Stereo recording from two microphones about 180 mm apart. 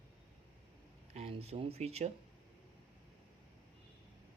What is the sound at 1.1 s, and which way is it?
Speech, 35° right (ahead or behind).